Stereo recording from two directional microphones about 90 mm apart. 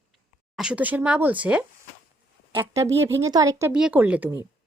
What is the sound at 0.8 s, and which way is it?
Speech, 20° right (ahead or behind).